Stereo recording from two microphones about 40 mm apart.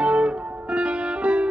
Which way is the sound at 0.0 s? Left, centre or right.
Right.